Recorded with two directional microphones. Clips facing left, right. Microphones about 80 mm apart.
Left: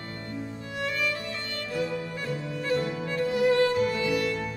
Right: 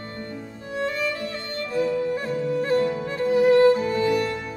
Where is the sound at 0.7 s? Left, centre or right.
Right.